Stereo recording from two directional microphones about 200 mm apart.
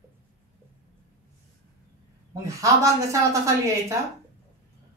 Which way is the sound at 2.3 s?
15° right (ahead or behind).